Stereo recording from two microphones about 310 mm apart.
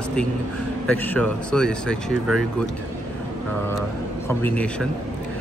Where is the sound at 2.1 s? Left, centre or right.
Right.